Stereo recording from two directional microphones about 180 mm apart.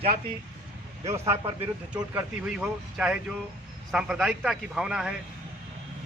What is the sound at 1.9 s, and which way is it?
Speech, 5° right (ahead or behind).